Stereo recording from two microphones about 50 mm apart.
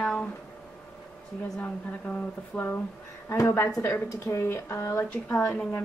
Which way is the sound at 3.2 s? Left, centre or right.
Left.